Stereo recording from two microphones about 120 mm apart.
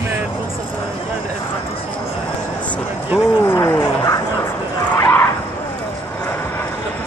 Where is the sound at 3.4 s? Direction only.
20° left (ahead or behind).